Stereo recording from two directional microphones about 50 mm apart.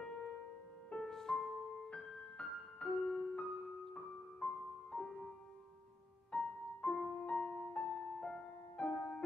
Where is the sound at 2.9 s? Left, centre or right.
Centre.